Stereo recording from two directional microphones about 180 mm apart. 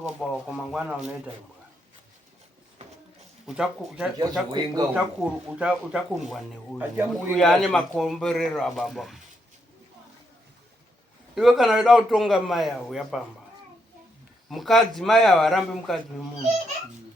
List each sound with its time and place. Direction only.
0.2 s speech: centre (ahead or behind)
3.4 s speech: centre (ahead or behind)
4.2 s speech: 20° right (ahead or behind)
5.2 s speech: 5° right (ahead or behind)
11.3 s speech: centre (ahead or behind)
14.5 s speech: centre (ahead or behind)